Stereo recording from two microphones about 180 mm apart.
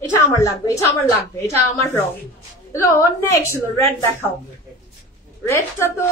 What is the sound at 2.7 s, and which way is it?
A woman's voice, 15° left (ahead or behind).